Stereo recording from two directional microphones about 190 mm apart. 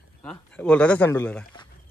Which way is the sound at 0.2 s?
5° left (ahead or behind).